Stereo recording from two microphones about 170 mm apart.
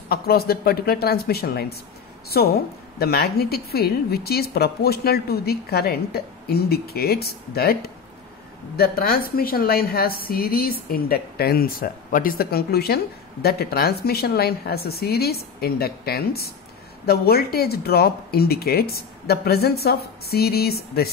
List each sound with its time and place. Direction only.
0.1 s a woman's voice: 65° left (ahead or behind)